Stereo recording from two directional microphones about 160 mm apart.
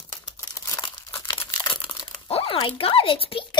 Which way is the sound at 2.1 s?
35° left (ahead or behind).